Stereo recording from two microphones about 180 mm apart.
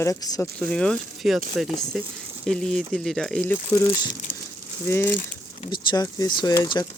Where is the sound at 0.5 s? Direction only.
5° left (ahead or behind).